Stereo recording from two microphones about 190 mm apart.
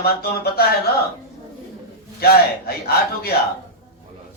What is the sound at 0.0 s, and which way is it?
Speech, 55° left (ahead or behind).